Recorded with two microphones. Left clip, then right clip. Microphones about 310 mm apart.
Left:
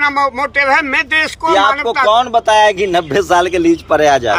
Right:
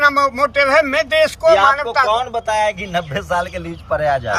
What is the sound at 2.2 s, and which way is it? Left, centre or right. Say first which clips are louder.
Speech: left 8 dB; centre.